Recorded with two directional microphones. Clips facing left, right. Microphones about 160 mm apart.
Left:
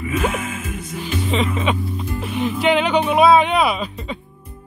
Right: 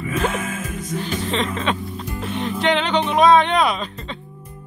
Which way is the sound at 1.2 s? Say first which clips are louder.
Left 4 dB; 5° left (ahead or behind).